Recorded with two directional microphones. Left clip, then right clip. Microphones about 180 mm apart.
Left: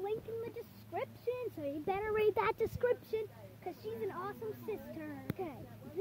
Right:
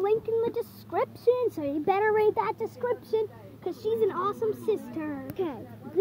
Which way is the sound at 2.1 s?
15° left (ahead or behind).